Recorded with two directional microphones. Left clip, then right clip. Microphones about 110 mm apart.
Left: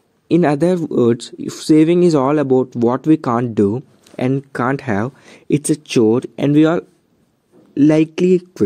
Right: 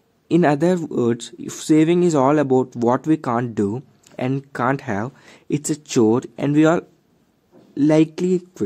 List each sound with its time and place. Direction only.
0.3 s speech: 25° left (ahead or behind)
7.7 s speech: 30° left (ahead or behind)